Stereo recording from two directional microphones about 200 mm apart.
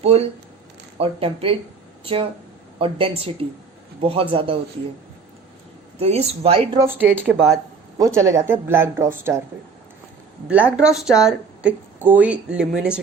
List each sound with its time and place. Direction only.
0.0 s speech: 30° right (ahead or behind)
2.7 s speech: 25° right (ahead or behind)
6.0 s speech: 30° right (ahead or behind)
6.7 s speech: 10° right (ahead or behind)
10.5 s speech: 5° right (ahead or behind)